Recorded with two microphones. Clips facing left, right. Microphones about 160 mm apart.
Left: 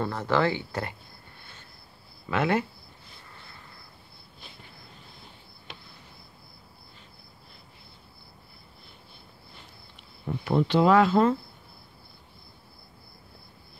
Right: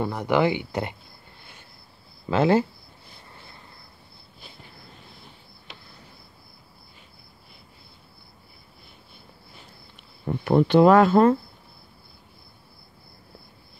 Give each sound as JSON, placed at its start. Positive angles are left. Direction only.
{"t": 0.0, "sound": "speech", "side_deg": -15}
{"t": 2.2, "sound": "speech", "side_deg": -30}
{"t": 10.4, "sound": "speech", "side_deg": -55}